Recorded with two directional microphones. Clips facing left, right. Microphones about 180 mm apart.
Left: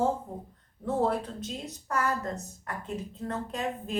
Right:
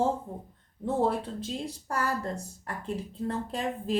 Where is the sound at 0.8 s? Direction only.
30° right (ahead or behind).